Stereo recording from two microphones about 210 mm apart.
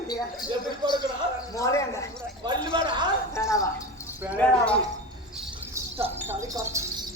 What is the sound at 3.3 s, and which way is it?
Speech, 15° left (ahead or behind).